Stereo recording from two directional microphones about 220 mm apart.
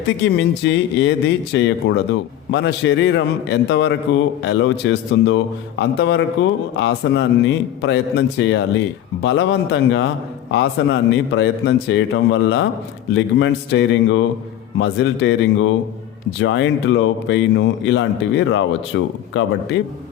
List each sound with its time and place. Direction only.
0.3 s a man's voice: 55° left (ahead or behind)